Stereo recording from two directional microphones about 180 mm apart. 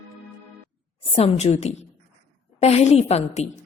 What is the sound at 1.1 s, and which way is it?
A woman's voice, 35° left (ahead or behind).